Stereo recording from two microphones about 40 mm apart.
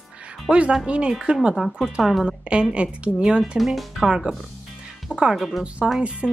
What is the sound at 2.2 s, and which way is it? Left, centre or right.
A woman's voice, right.